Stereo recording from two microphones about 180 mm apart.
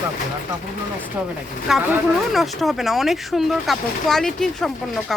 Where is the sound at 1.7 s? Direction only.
Centre (ahead or behind).